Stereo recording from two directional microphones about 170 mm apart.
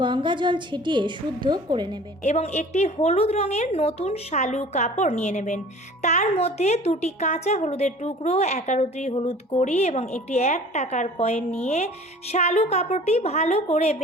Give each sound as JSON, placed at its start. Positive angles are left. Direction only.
{"t": 0.0, "sound": "a woman's voice", "side_deg": -30}
{"t": 2.2, "sound": "a woman's voice", "side_deg": 40}